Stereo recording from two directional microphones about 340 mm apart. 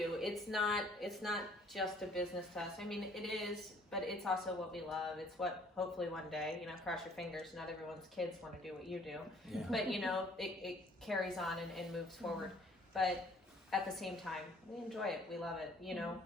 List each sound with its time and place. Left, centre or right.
0.0 s speech: centre